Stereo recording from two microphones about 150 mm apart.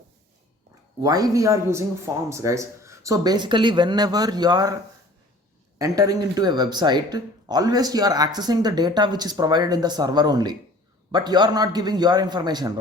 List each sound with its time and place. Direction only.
1.0 s speech: 25° right (ahead or behind)
5.8 s speech: 25° right (ahead or behind)